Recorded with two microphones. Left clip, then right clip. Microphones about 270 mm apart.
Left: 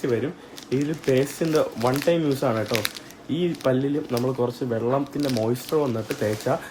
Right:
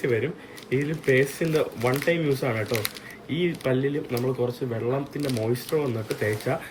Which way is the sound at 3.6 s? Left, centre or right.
Left.